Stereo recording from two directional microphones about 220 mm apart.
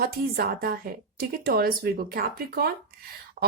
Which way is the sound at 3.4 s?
35° right (ahead or behind).